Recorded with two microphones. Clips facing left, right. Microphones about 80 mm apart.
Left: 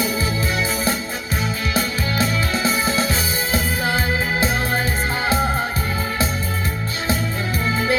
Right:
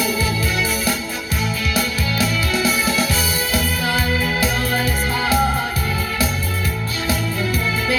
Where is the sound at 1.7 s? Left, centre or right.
Left.